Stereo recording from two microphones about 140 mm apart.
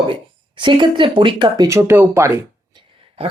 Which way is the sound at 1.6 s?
20° right (ahead or behind).